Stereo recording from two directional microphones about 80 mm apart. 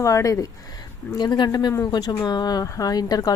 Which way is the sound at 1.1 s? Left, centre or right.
Left.